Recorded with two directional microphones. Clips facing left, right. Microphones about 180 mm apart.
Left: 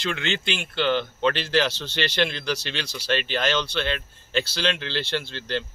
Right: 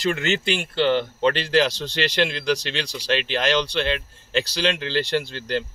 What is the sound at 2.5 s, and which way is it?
Speech, 15° right (ahead or behind).